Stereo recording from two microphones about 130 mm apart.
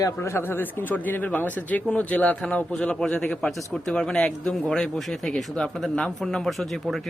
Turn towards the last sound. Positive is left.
turn(degrees=0)  # may be behind; listen again after turning